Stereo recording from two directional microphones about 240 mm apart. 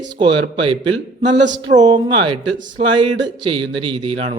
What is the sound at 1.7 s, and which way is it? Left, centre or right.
Speech, right.